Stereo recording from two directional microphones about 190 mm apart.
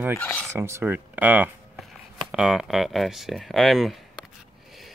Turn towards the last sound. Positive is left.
turn(degrees=0)  # may be behind; listen again after turning